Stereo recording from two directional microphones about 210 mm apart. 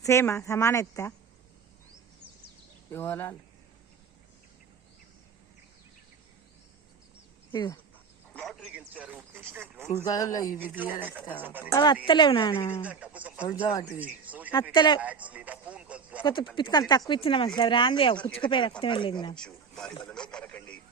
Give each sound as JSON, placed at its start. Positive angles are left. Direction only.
{"t": 0.0, "sound": "a woman's voice", "side_deg": 15}
{"t": 2.9, "sound": "a woman's voice", "side_deg": 10}
{"t": 7.5, "sound": "speech", "side_deg": 20}
{"t": 8.3, "sound": "radio", "side_deg": 0}
{"t": 10.1, "sound": "a woman's voice", "side_deg": 15}
{"t": 10.6, "sound": "speech", "side_deg": -10}
{"t": 11.7, "sound": "speech", "side_deg": 20}
{"t": 12.8, "sound": "speech", "side_deg": -5}
{"t": 13.6, "sound": "speech", "side_deg": 25}
{"t": 14.0, "sound": "speech", "side_deg": -5}
{"t": 14.7, "sound": "speech", "side_deg": 20}
{"t": 15.0, "sound": "speech", "side_deg": -5}
{"t": 16.2, "sound": "speech", "side_deg": 25}
{"t": 19.4, "sound": "speech", "side_deg": 5}